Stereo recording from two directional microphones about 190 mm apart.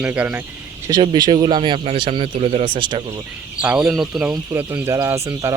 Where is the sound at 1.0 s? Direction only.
25° right (ahead or behind).